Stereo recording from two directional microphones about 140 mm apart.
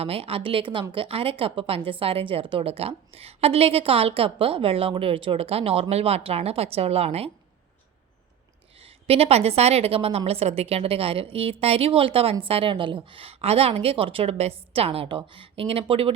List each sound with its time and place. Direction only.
0.0 s a woman's voice: 45° right (ahead or behind)
8.8 s a woman's voice: 45° right (ahead or behind)